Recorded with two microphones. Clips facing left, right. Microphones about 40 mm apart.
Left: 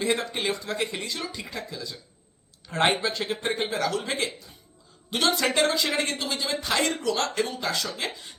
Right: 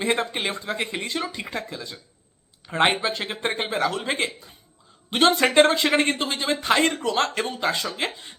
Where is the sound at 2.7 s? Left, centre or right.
Right.